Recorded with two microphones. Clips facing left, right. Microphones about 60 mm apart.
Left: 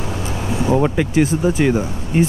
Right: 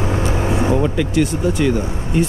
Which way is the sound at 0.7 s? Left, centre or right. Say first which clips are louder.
Left 1 dB; left.